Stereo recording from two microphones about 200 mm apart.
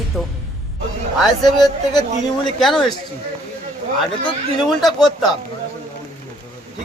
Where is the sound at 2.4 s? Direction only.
Centre (ahead or behind).